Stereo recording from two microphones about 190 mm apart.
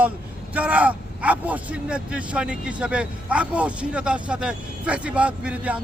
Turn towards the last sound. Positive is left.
turn(degrees=-5)  # may be behind; listen again after turning